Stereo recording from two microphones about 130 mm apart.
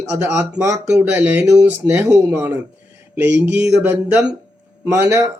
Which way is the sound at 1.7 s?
15° right (ahead or behind).